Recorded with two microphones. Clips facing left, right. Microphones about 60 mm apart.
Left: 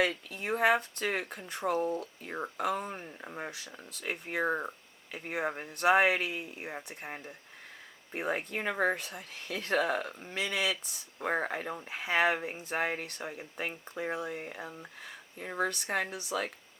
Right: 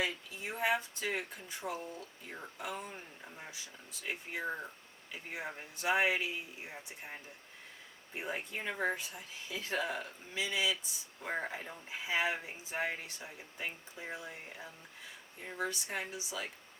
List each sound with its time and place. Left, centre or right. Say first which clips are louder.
0.0 s speech: left 7 dB; left